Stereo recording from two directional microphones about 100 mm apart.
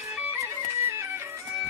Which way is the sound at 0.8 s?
25° right (ahead or behind).